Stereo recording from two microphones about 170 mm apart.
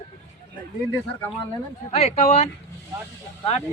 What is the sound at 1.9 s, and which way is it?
Speech, 35° left (ahead or behind).